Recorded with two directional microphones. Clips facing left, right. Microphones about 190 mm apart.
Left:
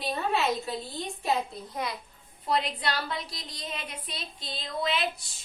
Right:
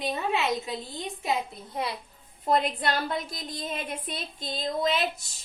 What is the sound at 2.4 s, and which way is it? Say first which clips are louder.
A woman's voice: right 4 dB; 50° right (ahead or behind).